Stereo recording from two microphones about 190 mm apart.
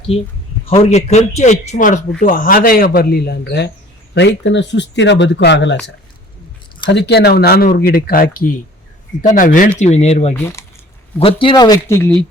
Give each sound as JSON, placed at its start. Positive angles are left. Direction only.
{"t": 0.1, "sound": "speech", "side_deg": 35}
{"t": 6.9, "sound": "speech", "side_deg": 60}
{"t": 10.4, "sound": "speech", "side_deg": 15}
{"t": 11.2, "sound": "speech", "side_deg": 30}